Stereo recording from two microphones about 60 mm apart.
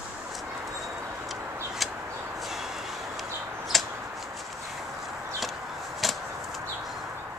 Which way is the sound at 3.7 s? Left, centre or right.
Centre.